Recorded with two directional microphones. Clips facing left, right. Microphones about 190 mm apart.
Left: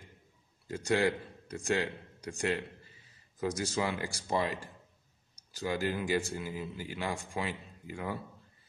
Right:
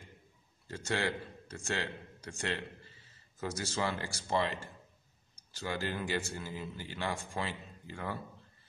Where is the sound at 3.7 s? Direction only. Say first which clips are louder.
Left 2 dB; 15° left (ahead or behind).